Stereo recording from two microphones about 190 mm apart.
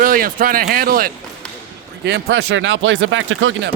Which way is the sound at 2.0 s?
65° right (ahead or behind).